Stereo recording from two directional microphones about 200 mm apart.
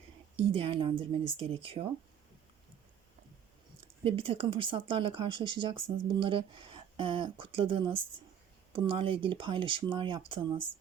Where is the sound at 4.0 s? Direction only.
30° right (ahead or behind).